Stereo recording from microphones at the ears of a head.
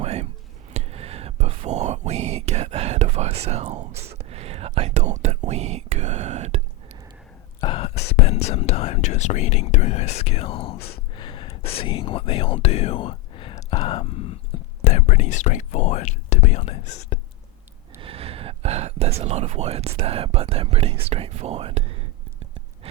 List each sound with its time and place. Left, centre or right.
0.0 s whispering: right
7.6 s speech: left
17.9 s speech: right